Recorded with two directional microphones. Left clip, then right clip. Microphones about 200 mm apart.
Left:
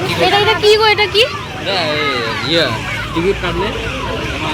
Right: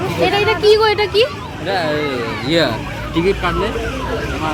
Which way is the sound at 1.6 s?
55° right (ahead or behind).